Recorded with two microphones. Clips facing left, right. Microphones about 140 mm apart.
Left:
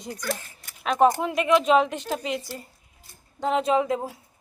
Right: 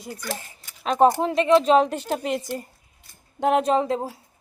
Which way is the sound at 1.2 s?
30° right (ahead or behind).